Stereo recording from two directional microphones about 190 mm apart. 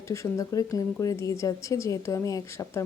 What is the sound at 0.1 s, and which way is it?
A woman's voice, 15° left (ahead or behind).